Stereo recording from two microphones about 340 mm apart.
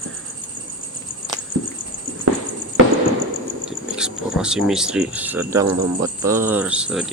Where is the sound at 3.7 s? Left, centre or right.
Centre.